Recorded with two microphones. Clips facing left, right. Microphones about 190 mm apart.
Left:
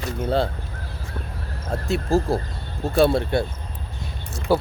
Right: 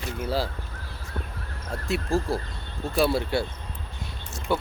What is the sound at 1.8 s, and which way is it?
Speech, centre (ahead or behind).